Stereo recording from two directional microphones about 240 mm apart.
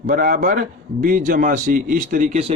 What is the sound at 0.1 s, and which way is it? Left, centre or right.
Speech, right.